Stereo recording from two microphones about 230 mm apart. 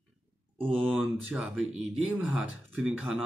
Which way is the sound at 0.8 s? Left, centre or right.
Centre.